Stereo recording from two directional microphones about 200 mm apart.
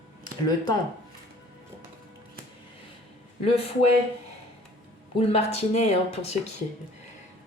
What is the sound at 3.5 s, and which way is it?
Speech, 30° left (ahead or behind).